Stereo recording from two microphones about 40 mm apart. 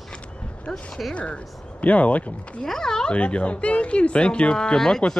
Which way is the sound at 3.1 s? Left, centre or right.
Left.